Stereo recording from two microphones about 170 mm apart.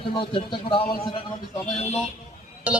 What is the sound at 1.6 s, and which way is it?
Speech, 40° left (ahead or behind).